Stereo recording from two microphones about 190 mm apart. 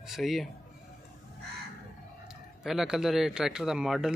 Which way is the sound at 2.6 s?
Centre (ahead or behind).